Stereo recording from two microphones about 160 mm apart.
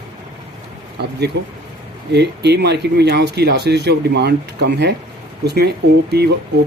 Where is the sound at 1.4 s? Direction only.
90° right.